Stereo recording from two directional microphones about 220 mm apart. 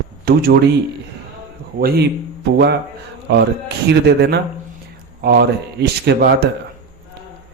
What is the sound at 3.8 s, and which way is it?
Speech, 50° right (ahead or behind).